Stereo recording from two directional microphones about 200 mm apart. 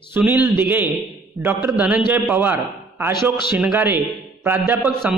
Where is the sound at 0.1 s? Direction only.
10° right (ahead or behind).